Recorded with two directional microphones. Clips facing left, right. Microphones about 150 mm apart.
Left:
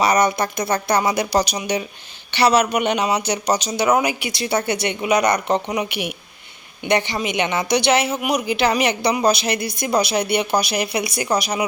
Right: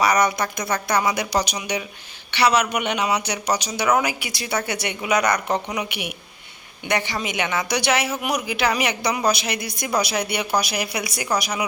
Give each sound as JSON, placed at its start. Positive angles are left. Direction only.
{"t": 0.0, "sound": "a man's voice", "side_deg": 25}